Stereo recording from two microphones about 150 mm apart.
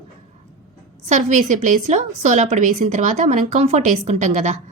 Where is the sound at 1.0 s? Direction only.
55° right (ahead or behind).